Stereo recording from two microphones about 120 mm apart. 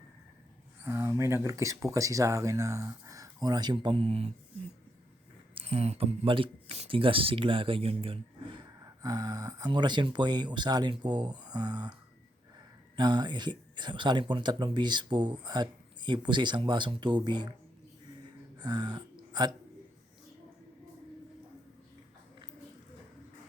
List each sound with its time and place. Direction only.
0.9 s speech: 20° right (ahead or behind); by 4.3 s 55° right (ahead or behind)
5.5 s speech: 55° right (ahead or behind)
8.8 s speech: 30° right (ahead or behind)
13.0 s speech: 35° right (ahead or behind)
18.6 s speech: 35° right (ahead or behind)